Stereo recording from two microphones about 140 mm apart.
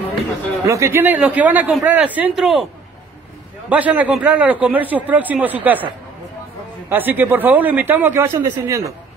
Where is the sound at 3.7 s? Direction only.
10° right (ahead or behind).